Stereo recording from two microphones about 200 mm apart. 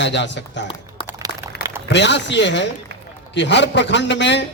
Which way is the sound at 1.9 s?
60° left (ahead or behind).